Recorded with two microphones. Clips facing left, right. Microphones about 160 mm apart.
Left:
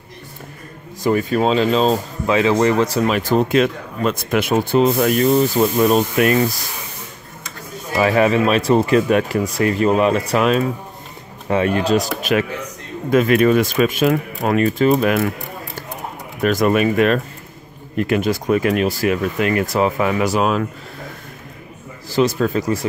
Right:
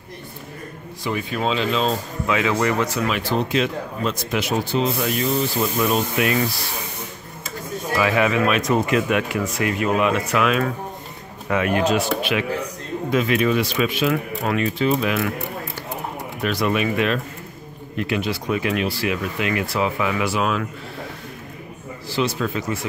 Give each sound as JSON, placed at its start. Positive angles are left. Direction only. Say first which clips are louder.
{"t": 1.0, "sound": "speech", "louder": "left 7 dB", "side_deg": 45}
{"t": 8.0, "sound": "speech", "louder": "left 5 dB", "side_deg": 35}
{"t": 16.4, "sound": "speech", "louder": "left 6 dB", "side_deg": 45}
{"t": 22.1, "sound": "speech", "louder": "left 6 dB", "side_deg": 45}